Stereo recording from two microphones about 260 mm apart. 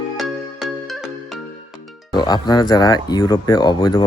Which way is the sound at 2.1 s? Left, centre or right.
Centre.